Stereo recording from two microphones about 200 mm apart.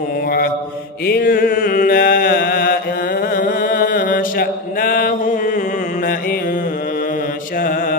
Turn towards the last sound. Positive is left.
turn(degrees=45)  # may be behind; listen again after turning